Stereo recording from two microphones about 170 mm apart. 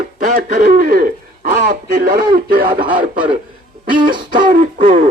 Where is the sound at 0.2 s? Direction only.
55° right (ahead or behind).